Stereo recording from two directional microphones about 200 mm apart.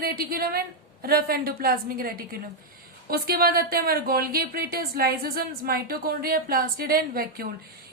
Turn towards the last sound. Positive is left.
turn(degrees=-45)  # may be behind; listen again after turning